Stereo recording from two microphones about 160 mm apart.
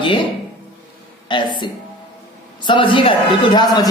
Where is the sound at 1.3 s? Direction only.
30° left (ahead or behind).